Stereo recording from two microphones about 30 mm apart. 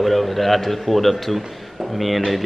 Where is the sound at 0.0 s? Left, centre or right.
Centre.